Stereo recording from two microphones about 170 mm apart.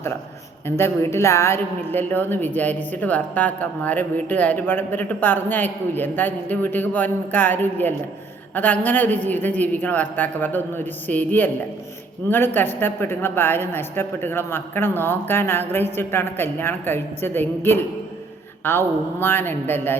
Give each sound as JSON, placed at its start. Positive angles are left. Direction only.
{"t": 0.8, "sound": "a woman's voice", "side_deg": 15}
{"t": 12.5, "sound": "a woman's voice", "side_deg": 10}